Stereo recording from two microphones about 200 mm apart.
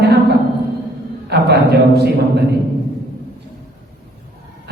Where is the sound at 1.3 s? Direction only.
55° right (ahead or behind).